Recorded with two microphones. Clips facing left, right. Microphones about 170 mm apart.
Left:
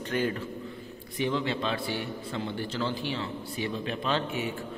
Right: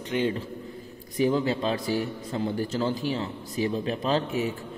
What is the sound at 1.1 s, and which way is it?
A man's voice, 40° right (ahead or behind).